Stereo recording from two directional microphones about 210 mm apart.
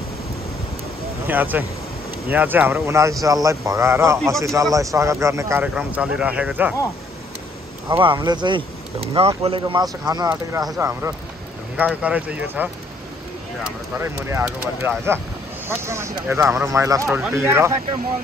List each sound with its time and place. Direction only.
1.2 s speech: 10° right (ahead or behind)
8.0 s speech: 20° right (ahead or behind); by 12.6 s 5° right (ahead or behind)
13.9 s speech: 10° right (ahead or behind)